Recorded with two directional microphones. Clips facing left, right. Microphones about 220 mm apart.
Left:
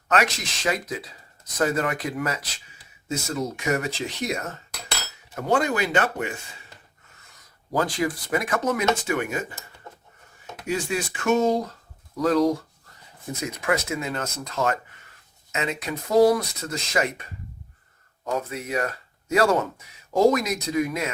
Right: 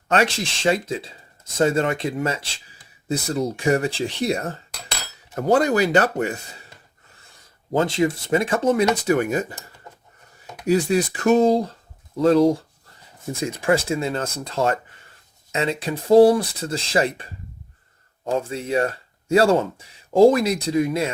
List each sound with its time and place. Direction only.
0.1 s speech: 30° right (ahead or behind)
10.7 s speech: 35° right (ahead or behind)